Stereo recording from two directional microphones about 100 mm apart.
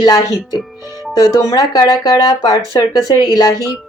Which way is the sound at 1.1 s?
35° left (ahead or behind).